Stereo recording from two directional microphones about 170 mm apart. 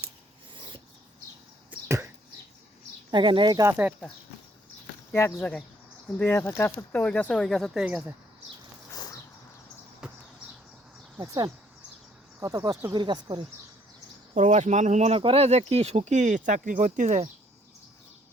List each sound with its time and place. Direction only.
1.7 s arrow: 15° right (ahead or behind)
3.1 s speech: 30° right (ahead or behind); by 3.9 s 15° right (ahead or behind)
5.1 s speech: 10° left (ahead or behind); by 8.1 s 5° right (ahead or behind)
10.0 s a sound: 5° right (ahead or behind)
11.2 s speech: 25° right (ahead or behind)
14.3 s speech: 45° right (ahead or behind)